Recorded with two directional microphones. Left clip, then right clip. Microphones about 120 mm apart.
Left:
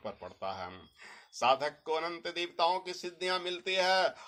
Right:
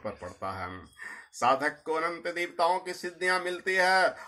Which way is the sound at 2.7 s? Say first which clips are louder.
Right 4 dB; 40° left (ahead or behind).